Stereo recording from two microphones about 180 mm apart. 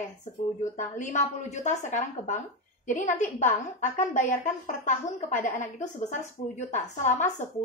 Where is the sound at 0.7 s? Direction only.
45° left (ahead or behind).